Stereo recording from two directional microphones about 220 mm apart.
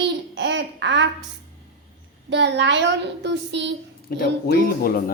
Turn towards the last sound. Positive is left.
turn(degrees=45)  # may be behind; listen again after turning